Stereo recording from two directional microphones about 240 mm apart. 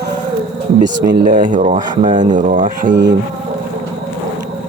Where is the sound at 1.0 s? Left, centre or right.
Right.